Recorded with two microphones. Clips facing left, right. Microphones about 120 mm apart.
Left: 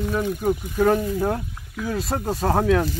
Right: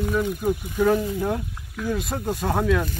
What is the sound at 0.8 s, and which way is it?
Speech, 35° left (ahead or behind).